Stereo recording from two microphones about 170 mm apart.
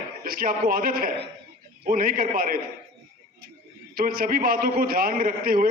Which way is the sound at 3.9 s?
60° right (ahead or behind).